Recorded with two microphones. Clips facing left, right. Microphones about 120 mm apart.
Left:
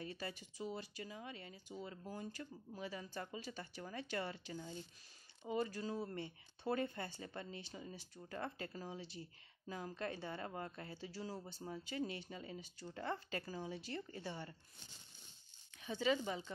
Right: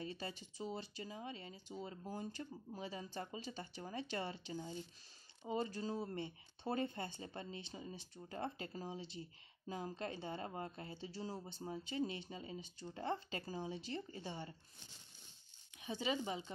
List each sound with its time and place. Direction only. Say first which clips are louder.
0.0 s speech: right 1 dB; 25° right (ahead or behind)
15.8 s speech: left 3 dB; 20° right (ahead or behind)